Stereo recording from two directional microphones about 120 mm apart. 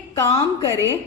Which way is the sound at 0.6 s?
25° right (ahead or behind).